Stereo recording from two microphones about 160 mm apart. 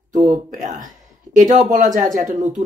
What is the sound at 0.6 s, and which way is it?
Speech, 50° right (ahead or behind).